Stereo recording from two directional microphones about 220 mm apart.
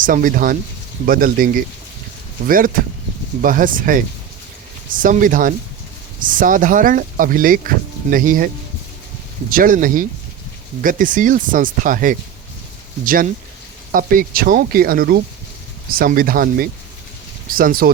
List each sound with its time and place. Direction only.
0.0 s speech: 40° right (ahead or behind)
9.5 s speech: 40° right (ahead or behind)
13.9 s speech: 40° right (ahead or behind)